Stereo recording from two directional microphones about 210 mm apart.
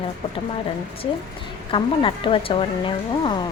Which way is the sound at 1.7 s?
25° left (ahead or behind).